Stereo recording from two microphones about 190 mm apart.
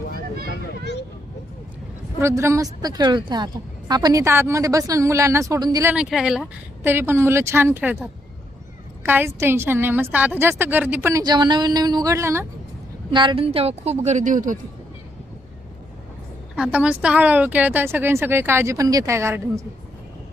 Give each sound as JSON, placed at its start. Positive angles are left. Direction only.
{"t": 0.4, "sound": "a sound", "side_deg": 65}
{"t": 2.1, "sound": "a woman's voice", "side_deg": -15}
{"t": 5.9, "sound": "a woman's voice", "side_deg": -5}
{"t": 9.0, "sound": "a woman's voice", "side_deg": -10}
{"t": 13.1, "sound": "speech", "side_deg": -25}
{"t": 16.6, "sound": "a woman's voice", "side_deg": -5}